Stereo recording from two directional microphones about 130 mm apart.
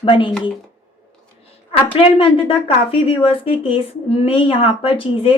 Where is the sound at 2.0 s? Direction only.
45° left (ahead or behind).